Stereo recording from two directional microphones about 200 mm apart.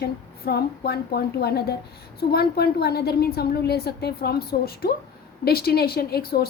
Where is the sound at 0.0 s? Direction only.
55° left (ahead or behind).